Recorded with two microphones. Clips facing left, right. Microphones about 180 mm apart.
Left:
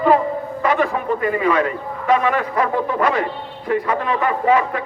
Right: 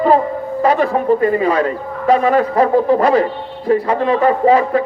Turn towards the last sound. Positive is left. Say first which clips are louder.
# right 5 dB
turn(degrees=-35)  # may be behind; listen again after turning